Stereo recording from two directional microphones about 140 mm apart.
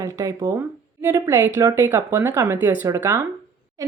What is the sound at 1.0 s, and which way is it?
Speech, 15° right (ahead or behind).